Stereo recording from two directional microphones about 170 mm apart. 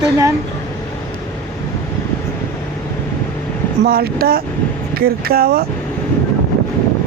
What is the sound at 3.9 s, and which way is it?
Speech, 60° right (ahead or behind).